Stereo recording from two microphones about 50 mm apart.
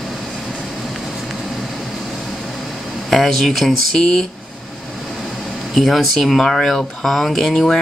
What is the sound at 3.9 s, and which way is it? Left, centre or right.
Speech, centre.